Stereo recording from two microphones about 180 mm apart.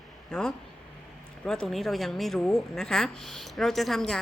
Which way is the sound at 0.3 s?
5° left (ahead or behind).